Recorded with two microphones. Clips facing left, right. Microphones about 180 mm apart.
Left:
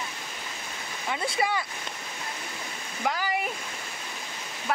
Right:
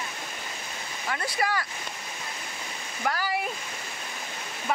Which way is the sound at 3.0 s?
15° left (ahead or behind).